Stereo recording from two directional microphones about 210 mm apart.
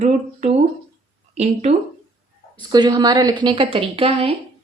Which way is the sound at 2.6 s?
20° right (ahead or behind).